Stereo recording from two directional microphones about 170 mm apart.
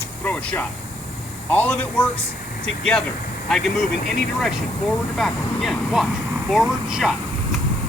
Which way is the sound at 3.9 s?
70° left (ahead or behind).